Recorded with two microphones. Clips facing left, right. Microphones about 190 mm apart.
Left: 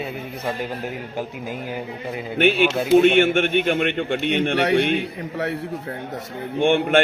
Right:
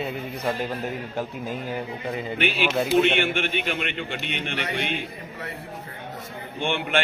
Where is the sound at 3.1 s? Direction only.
50° left (ahead or behind); by 4.9 s 70° left (ahead or behind).